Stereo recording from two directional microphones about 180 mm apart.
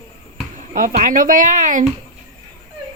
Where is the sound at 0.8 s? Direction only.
50° right (ahead or behind).